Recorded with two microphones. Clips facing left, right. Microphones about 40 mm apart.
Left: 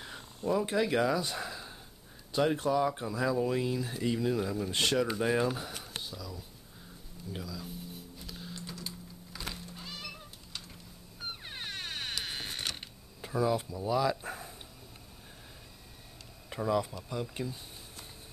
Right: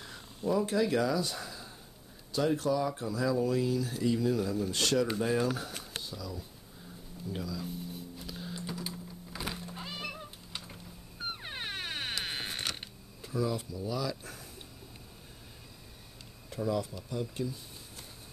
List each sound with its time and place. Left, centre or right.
0.7 s speech: left; by 6.4 s centre
7.3 s typing: centre
9.7 s cat: centre
11.4 s vehicle: centre
13.2 s speech: left
16.4 s a sound: left
17.1 s speech: left